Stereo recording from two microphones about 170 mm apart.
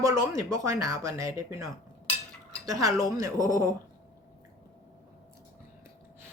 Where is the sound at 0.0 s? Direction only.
20° right (ahead or behind).